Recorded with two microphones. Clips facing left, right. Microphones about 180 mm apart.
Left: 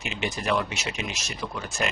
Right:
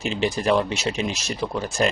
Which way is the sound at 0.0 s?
35° right (ahead or behind).